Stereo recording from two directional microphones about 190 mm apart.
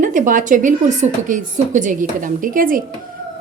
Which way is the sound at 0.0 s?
45° right (ahead or behind).